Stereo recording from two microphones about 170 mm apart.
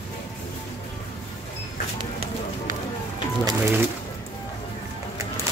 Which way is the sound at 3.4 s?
20° right (ahead or behind).